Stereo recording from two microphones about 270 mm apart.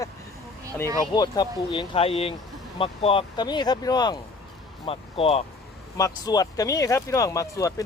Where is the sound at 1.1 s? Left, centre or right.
Centre.